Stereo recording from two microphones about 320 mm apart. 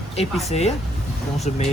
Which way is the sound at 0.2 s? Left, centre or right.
Centre.